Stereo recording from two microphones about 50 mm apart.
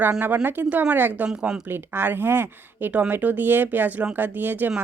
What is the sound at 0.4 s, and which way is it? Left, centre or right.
Speech, right.